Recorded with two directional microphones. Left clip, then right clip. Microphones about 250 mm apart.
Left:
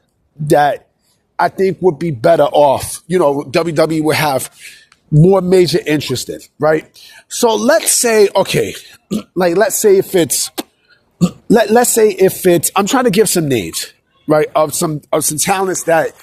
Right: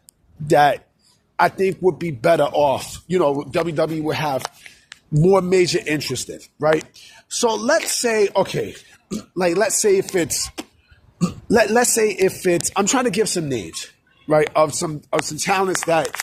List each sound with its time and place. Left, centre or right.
0.4 s speech: left
3.5 s speech: left
5.2 s speech: left
9.0 s speech: left
15.9 s speech: centre